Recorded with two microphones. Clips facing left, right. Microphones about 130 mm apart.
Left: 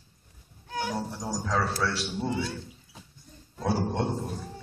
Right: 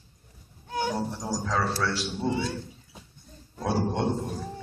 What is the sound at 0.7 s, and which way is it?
Music, 30° right (ahead or behind).